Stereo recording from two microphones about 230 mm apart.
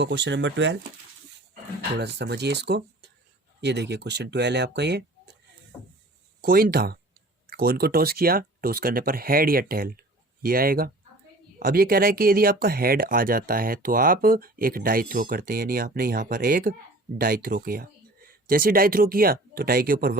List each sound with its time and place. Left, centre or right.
0.0 s speech: right
2.0 s speech: right
6.4 s speech: right